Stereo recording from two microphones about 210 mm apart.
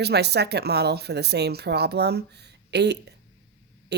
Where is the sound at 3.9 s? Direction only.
50° right (ahead or behind).